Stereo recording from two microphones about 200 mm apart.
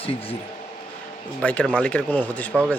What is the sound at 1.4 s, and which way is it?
Speech, 5° left (ahead or behind).